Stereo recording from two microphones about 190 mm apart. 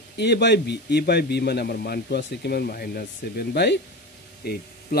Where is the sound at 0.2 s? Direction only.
60° left (ahead or behind).